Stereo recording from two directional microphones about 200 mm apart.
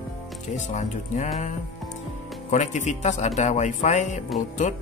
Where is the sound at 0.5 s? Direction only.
35° left (ahead or behind).